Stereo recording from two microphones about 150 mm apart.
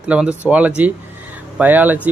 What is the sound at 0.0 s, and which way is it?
Speech, 5° right (ahead or behind).